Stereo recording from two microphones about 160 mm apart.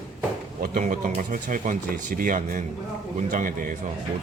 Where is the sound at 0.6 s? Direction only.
60° right (ahead or behind).